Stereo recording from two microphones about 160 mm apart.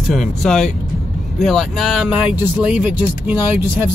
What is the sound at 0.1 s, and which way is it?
Speech, 5° left (ahead or behind).